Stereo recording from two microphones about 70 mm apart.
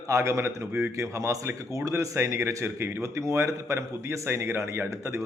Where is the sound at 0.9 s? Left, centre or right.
Right.